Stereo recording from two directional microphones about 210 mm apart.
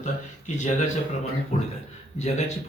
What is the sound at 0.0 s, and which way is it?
Speech, 35° left (ahead or behind).